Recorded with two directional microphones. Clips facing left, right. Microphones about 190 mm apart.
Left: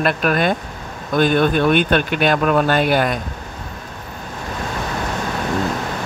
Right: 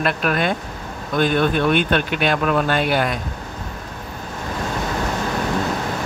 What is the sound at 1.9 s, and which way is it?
A man's voice, 45° left (ahead or behind).